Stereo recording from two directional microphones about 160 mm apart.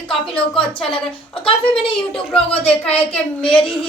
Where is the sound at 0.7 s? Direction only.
35° left (ahead or behind).